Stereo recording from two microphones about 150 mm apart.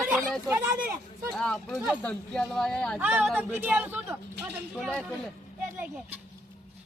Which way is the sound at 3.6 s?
15° right (ahead or behind).